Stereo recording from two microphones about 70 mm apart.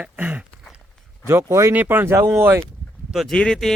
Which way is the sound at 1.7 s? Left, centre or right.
Right.